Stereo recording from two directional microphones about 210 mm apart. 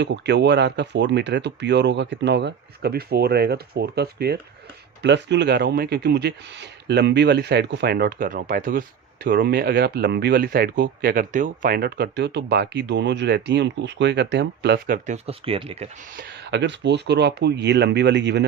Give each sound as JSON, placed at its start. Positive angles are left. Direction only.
{"t": 0.0, "sound": "speech", "side_deg": -55}
{"t": 16.1, "sound": "speech", "side_deg": -50}